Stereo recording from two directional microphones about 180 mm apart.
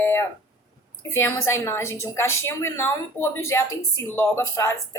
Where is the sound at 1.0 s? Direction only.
15° left (ahead or behind).